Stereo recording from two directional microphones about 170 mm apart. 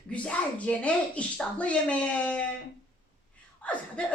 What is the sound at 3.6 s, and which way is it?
Speech, 5° left (ahead or behind).